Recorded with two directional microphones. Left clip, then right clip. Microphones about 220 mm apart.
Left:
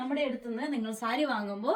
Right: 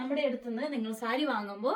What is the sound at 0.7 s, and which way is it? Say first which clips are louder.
Speech: left 2 dB; 20° left (ahead or behind).